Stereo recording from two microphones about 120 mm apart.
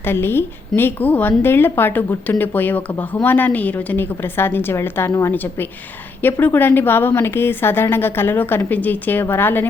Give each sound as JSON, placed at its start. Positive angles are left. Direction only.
{"t": 0.0, "sound": "a woman's voice", "side_deg": 20}